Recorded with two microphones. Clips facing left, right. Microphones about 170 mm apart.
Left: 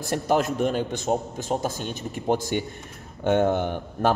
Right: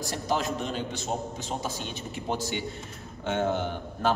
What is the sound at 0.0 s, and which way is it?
A man's voice, 55° left (ahead or behind).